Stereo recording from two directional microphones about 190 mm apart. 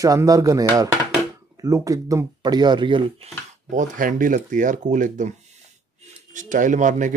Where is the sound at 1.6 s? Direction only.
15° right (ahead or behind).